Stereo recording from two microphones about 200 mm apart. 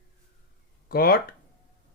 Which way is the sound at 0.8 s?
50° left (ahead or behind).